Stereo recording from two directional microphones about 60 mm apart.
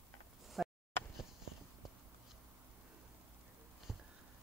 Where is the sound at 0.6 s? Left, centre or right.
Centre.